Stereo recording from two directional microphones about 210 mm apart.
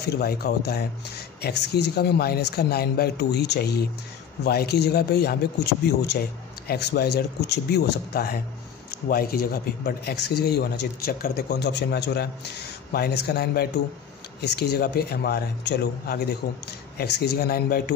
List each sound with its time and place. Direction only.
0.0 s a man's voice: 50° left (ahead or behind)